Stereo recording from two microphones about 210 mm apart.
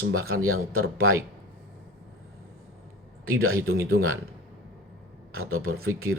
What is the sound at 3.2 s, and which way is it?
Speech, 80° right.